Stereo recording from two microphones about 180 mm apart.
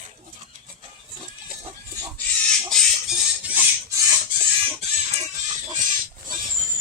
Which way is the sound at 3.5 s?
10° right (ahead or behind).